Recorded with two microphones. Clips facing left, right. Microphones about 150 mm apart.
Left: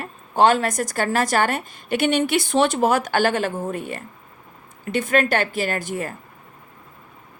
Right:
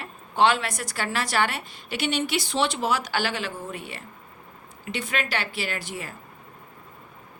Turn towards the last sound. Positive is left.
turn(degrees=50)  # may be behind; listen again after turning